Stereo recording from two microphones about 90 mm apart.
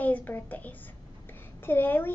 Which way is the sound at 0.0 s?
20° left (ahead or behind).